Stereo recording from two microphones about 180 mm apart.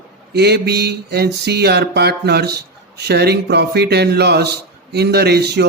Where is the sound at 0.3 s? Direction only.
65° right (ahead or behind).